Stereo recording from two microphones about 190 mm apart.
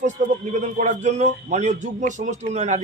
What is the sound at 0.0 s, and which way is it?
Speech, 40° right (ahead or behind).